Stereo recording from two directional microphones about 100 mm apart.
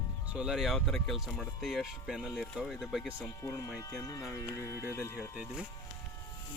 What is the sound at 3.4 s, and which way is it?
Speech, 30° left (ahead or behind).